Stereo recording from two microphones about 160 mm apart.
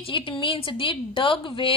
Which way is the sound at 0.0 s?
30° left (ahead or behind).